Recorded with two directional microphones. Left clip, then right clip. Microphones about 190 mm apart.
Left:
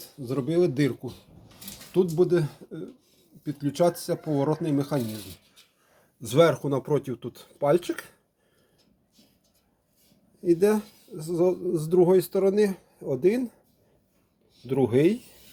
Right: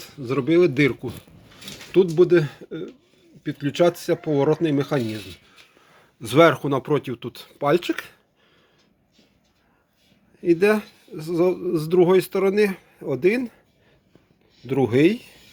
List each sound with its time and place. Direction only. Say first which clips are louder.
0.0 s speech: right 6 dB; 15° right (ahead or behind)
6.2 s a man's voice: right 5 dB; centre (ahead or behind)
10.4 s a man's voice: right 4 dB; centre (ahead or behind)
14.7 s a man's voice: right 4 dB; 5° right (ahead or behind)